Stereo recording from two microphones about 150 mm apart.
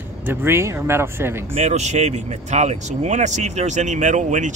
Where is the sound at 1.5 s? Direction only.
50° right (ahead or behind).